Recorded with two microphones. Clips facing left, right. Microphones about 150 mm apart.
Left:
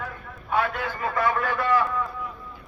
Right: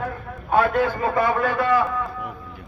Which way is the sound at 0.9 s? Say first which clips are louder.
Right 4 dB; 30° right (ahead or behind).